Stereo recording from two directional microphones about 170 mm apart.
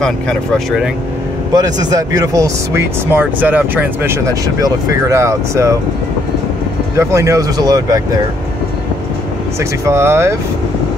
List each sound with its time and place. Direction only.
0.0 s speech: 5° left (ahead or behind)
1.5 s speech: 20° right (ahead or behind)
7.0 s speech: 15° right (ahead or behind)
9.6 s speech: 15° right (ahead or behind)